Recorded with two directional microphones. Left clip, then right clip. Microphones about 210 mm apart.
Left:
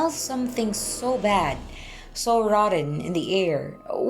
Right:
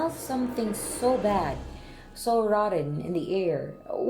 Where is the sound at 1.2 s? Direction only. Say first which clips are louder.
Left 4 dB; 40° left (ahead or behind).